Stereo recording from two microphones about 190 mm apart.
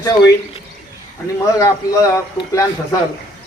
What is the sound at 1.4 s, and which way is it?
Speech, 15° left (ahead or behind).